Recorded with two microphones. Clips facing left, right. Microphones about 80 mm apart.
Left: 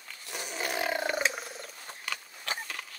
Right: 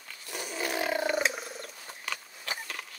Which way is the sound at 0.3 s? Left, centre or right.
Centre.